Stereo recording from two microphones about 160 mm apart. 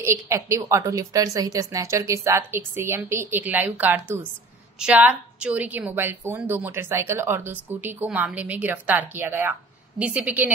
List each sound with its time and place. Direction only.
0.0 s a woman's voice: 20° right (ahead or behind)